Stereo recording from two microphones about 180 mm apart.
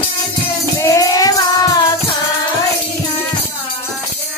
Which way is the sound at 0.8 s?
20° left (ahead or behind).